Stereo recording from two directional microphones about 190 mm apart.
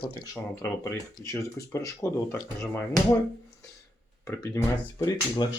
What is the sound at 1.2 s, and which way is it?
Speech, 15° left (ahead or behind).